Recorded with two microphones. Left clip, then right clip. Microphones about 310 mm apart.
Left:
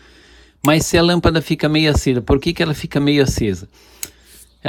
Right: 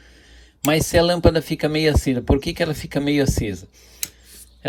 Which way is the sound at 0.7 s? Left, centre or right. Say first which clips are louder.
Right 1 dB; centre.